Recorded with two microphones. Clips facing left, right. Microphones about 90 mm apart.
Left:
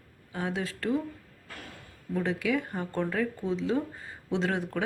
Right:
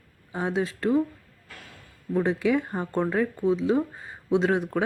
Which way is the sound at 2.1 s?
25° right (ahead or behind).